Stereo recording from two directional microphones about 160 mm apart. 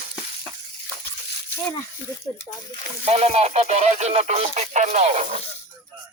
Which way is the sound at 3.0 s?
40° right (ahead or behind).